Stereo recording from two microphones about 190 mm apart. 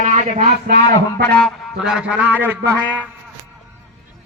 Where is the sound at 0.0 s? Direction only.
40° right (ahead or behind).